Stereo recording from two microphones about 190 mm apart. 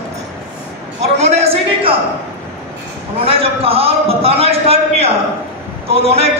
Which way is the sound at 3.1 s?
30° right (ahead or behind).